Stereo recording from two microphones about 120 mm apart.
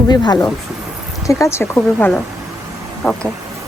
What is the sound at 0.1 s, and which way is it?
A woman's voice, 35° left (ahead or behind).